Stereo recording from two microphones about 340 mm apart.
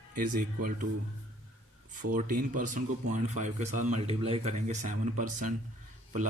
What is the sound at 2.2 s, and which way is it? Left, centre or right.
A man's voice, right.